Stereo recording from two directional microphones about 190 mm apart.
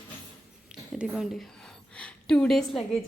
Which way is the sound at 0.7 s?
5° right (ahead or behind).